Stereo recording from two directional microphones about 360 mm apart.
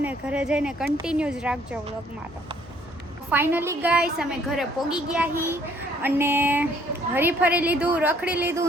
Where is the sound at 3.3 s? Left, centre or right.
Centre.